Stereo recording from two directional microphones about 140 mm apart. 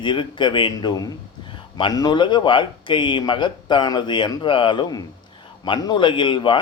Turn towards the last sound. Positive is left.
turn(degrees=35)  # may be behind; listen again after turning